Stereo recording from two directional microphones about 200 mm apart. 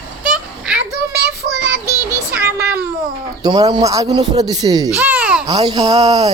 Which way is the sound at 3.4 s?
20° right (ahead or behind).